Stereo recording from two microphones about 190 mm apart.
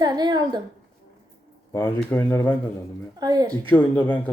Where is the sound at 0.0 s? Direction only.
20° right (ahead or behind).